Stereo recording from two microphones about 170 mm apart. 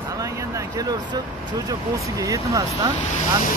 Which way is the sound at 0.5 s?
20° right (ahead or behind).